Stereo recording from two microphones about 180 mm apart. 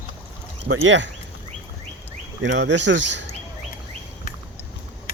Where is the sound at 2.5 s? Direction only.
75° right (ahead or behind).